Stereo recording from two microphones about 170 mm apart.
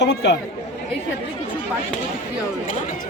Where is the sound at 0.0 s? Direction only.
90° left.